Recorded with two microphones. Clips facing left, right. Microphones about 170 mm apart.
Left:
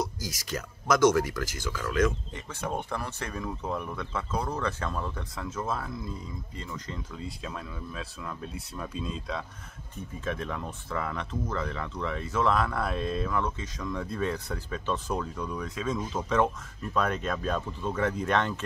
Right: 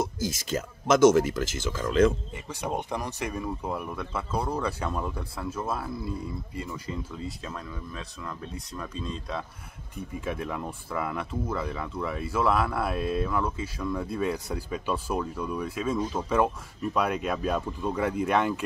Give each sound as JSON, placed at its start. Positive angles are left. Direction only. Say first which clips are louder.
{"t": 0.0, "sound": "speech", "louder": "right 4 dB", "side_deg": -25}
{"t": 2.3, "sound": "speech", "louder": "right 2 dB", "side_deg": -10}
{"t": 10.2, "sound": "speech", "louder": "right 1 dB", "side_deg": -10}